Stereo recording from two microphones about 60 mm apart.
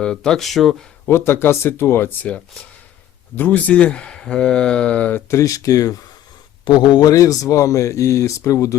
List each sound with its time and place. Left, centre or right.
0.0 s speech: centre
1.0 s speech: left
3.3 s speech: left
5.3 s speech: left
7.0 s speech: left